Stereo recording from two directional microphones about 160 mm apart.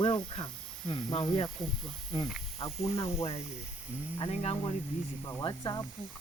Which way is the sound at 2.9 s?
40° left (ahead or behind).